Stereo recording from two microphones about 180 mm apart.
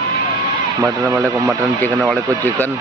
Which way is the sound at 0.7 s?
20° right (ahead or behind).